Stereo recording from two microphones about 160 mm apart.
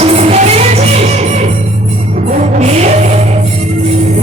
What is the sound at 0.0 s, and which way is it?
Music, 40° right (ahead or behind).